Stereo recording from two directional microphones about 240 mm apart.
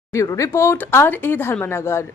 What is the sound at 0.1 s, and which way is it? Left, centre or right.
Speech, centre.